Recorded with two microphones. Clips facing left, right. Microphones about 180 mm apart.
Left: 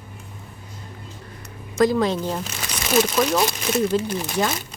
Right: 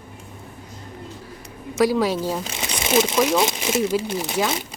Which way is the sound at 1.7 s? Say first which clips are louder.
Even; 10° right (ahead or behind).